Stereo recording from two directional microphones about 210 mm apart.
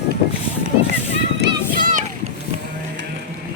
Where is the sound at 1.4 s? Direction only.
55° right (ahead or behind).